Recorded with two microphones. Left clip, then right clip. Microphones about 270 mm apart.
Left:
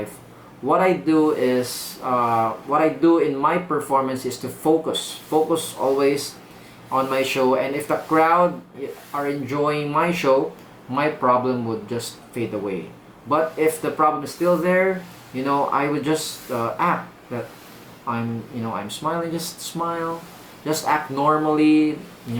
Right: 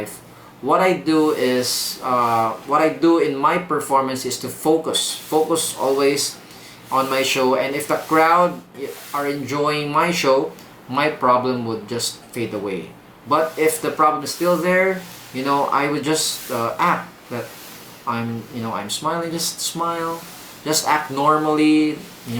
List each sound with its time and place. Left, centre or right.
0.7 s speech: centre
4.6 s speech: centre
4.9 s speech: centre
5.3 s speech: centre
6.0 s speech: centre
11.5 s speech: centre
11.9 s speech: centre
21.2 s speech: centre
21.5 s speech: centre